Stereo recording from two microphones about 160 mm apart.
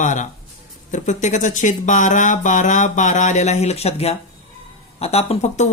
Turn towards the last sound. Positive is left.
turn(degrees=40)  # may be behind; listen again after turning